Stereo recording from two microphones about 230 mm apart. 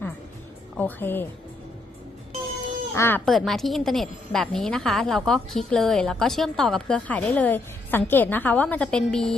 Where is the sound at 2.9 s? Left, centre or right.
Centre.